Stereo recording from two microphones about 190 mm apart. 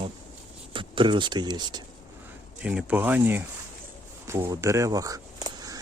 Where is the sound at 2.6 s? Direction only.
10° right (ahead or behind).